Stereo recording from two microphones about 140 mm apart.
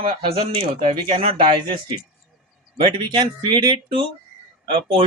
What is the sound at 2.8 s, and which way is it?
Speech, 30° right (ahead or behind).